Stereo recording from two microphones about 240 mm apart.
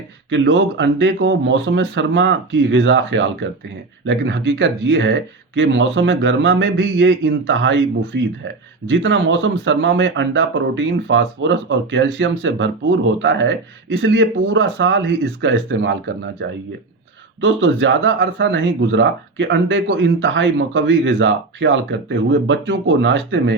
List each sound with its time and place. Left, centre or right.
0.3 s speech: right